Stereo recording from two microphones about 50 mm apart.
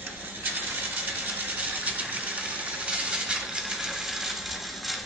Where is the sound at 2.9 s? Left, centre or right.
Centre.